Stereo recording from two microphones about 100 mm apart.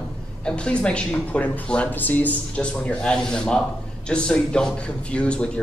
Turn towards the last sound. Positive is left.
turn(degrees=10)  # may be behind; listen again after turning